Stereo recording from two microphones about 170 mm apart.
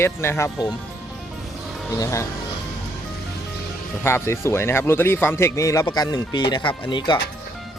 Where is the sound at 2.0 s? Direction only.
15° left (ahead or behind).